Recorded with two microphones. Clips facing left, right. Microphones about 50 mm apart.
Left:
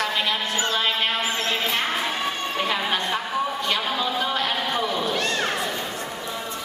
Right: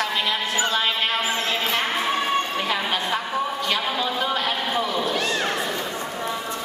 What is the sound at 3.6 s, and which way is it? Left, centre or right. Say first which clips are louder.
Cat: even; centre.